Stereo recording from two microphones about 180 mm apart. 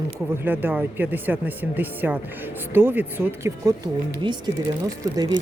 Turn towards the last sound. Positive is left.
turn(degrees=-25)  # may be behind; listen again after turning